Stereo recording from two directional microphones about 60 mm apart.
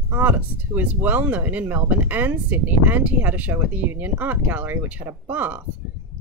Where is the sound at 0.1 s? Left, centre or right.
Right.